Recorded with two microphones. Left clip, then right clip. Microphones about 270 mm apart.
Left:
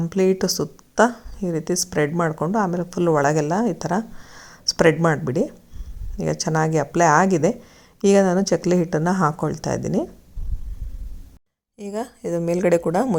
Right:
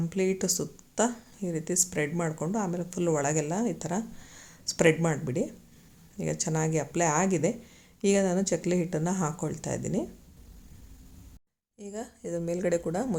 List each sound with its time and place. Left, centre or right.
0.0 s a woman's voice: centre
11.8 s a woman's voice: centre